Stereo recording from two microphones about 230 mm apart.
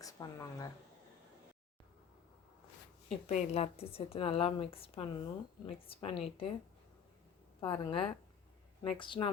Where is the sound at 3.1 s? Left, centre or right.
Left.